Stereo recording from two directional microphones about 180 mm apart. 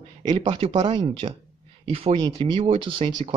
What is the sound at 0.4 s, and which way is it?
Speech, 30° right (ahead or behind).